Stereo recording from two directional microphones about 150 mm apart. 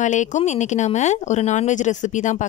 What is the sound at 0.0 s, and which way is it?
Speech, 55° left (ahead or behind).